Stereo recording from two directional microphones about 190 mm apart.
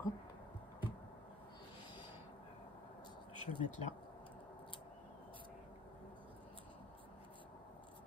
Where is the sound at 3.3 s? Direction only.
25° right (ahead or behind).